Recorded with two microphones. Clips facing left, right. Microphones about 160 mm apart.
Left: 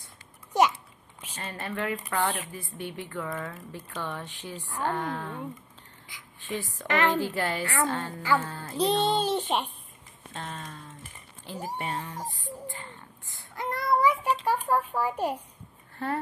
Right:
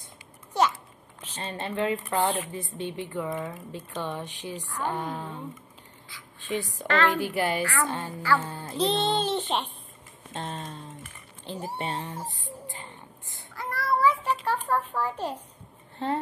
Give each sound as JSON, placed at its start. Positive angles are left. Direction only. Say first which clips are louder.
{"t": 0.5, "sound": "a sound", "louder": "left 2 dB", "side_deg": 15}
{"t": 1.4, "sound": "speech", "louder": "right 4 dB", "side_deg": -25}
{"t": 6.1, "sound": "a sound", "louder": "right 1 dB", "side_deg": 15}
{"t": 6.4, "sound": "a woman's voice", "louder": "right 3 dB", "side_deg": -15}
{"t": 6.9, "sound": "a child's voice", "louder": "right 1 dB", "side_deg": 15}
{"t": 7.2, "sound": "speech", "louder": "right 2 dB", "side_deg": -15}
{"t": 7.6, "sound": "a woman's voice", "louder": "even", "side_deg": 20}
{"t": 8.4, "sound": "speech", "louder": "even", "side_deg": -20}
{"t": 8.7, "sound": "a child's voice", "louder": "left 1 dB", "side_deg": 10}
{"t": 10.3, "sound": "speech", "louder": "right 3 dB", "side_deg": -25}
{"t": 12.6, "sound": "a sound", "louder": "left 1 dB", "side_deg": -15}
{"t": 13.6, "sound": "a sound", "louder": "left 1 dB", "side_deg": 20}
{"t": 16.0, "sound": "speech", "louder": "right 2 dB", "side_deg": -20}